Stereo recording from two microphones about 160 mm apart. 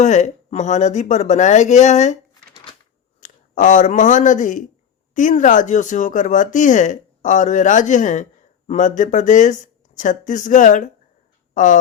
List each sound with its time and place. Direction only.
0.0 s speech: 45° left (ahead or behind)
3.2 s speech: 50° left (ahead or behind)